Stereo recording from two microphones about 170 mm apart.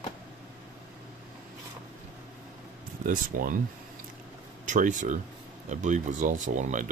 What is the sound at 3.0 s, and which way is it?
Speech, 55° right (ahead or behind).